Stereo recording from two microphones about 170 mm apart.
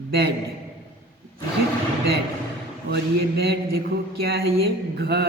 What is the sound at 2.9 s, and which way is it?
A woman's voice, 70° right (ahead or behind).